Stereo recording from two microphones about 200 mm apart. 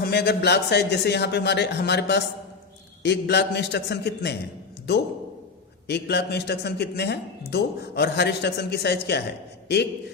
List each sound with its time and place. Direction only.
0.0 s speech: 55° left (ahead or behind)